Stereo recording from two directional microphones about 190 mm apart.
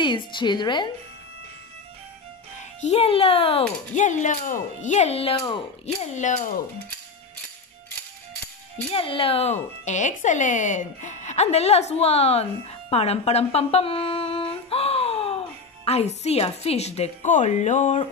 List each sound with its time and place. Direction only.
0.0 s a woman's voice: 25° left (ahead or behind)
2.8 s speech: 35° left (ahead or behind)
8.9 s speech: 30° left (ahead or behind)